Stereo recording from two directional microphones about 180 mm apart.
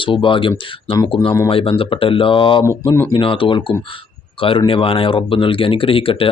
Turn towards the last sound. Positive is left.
turn(degrees=30)  # may be behind; listen again after turning